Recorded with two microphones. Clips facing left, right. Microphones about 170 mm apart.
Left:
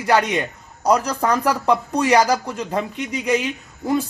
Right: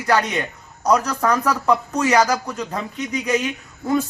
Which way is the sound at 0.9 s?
30° left (ahead or behind).